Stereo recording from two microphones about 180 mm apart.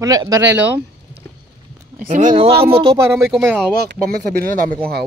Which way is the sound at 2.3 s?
30° right (ahead or behind).